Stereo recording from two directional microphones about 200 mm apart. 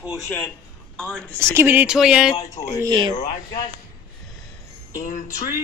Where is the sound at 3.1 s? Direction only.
20° left (ahead or behind).